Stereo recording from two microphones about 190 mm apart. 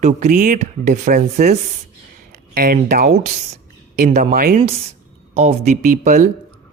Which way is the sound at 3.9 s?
40° right (ahead or behind).